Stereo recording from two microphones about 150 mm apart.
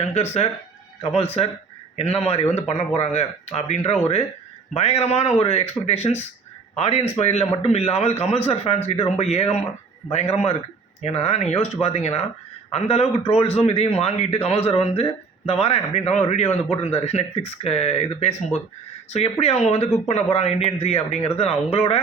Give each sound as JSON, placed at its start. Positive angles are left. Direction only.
{"t": 0.0, "sound": "a man's voice", "side_deg": 45}
{"t": 2.0, "sound": "a man's voice", "side_deg": 45}
{"t": 11.0, "sound": "a man's voice", "side_deg": 45}